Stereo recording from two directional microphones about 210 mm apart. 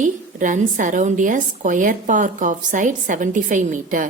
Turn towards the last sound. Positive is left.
turn(degrees=-40)  # may be behind; listen again after turning